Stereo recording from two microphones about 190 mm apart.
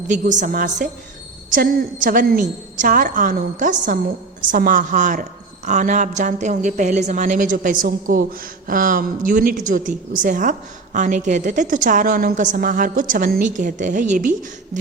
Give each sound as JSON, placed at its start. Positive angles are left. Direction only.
{"t": 0.1, "sound": "a woman's voice", "side_deg": -40}